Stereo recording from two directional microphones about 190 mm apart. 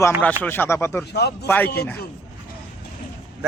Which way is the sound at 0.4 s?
10° left (ahead or behind).